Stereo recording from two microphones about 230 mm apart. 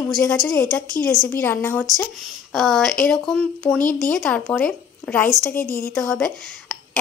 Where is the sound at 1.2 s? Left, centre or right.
Centre.